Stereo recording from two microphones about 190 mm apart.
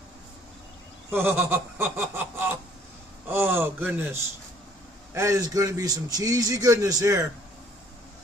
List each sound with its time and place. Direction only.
1.1 s a man's voice: 10° right (ahead or behind)